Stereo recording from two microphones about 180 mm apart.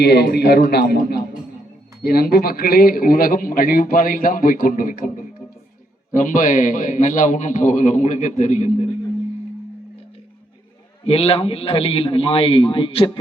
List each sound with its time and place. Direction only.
0.0 s a man's voice: 65° left (ahead or behind); by 8.9 s 40° left (ahead or behind)
11.0 s a man's voice: 35° left (ahead or behind)